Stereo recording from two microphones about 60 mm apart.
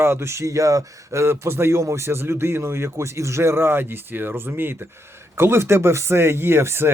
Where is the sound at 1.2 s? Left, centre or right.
Right.